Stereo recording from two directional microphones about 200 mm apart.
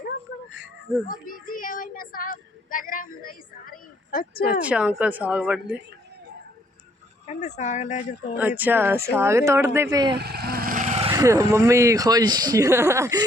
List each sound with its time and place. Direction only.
1.0 s child singing: 45° left (ahead or behind)
4.6 s speech: 5° right (ahead or behind)
7.3 s speech: 35° left (ahead or behind)
8.4 s speech: 10° right (ahead or behind)
10.2 s vehicle: 50° right (ahead or behind); by 11.1 s 35° right (ahead or behind)
11.1 s speech: 15° right (ahead or behind)